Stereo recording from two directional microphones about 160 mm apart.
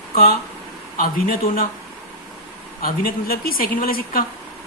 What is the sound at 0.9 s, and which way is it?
Speech, 60° left (ahead or behind).